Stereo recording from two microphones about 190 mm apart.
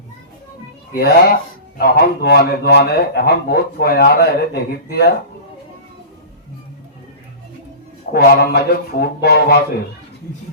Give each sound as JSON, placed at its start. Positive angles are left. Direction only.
{"t": 0.9, "sound": "speech", "side_deg": 55}
{"t": 8.1, "sound": "speech", "side_deg": 55}